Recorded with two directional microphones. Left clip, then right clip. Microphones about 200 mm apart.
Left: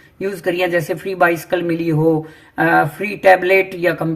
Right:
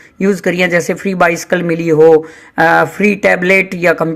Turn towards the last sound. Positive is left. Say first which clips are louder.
# right 4 dB
turn(degrees=-45)  # may be behind; listen again after turning